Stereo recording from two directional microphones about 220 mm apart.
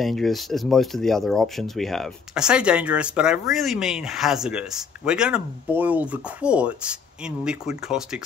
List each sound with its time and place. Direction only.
0.0 s speech: centre (ahead or behind)